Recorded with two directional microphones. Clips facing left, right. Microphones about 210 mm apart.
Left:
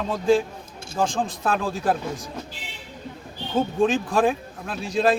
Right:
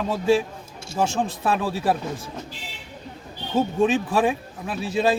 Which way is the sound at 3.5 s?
5° right (ahead or behind).